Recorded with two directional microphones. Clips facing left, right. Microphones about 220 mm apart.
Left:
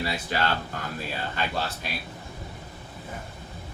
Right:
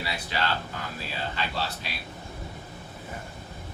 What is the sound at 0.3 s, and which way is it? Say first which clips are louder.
Speech: left 1 dB; 50° left (ahead or behind).